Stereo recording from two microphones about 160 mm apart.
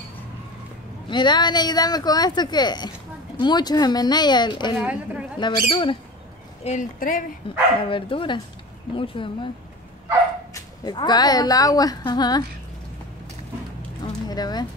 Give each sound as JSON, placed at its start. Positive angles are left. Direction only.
{"t": 1.1, "sound": "a woman's voice", "side_deg": 30}
{"t": 4.7, "sound": "speech", "side_deg": -5}
{"t": 5.4, "sound": "speech", "side_deg": 35}
{"t": 6.6, "sound": "speech", "side_deg": 50}
{"t": 7.9, "sound": "speech", "side_deg": 30}
{"t": 10.5, "sound": "a woman's voice", "side_deg": 25}
{"t": 14.0, "sound": "a sound", "side_deg": 25}